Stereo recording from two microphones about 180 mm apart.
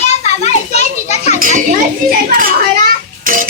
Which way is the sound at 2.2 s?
50° right (ahead or behind).